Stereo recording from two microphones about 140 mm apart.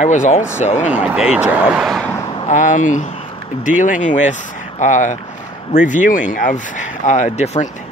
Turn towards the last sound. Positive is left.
turn(degrees=50)  # may be behind; listen again after turning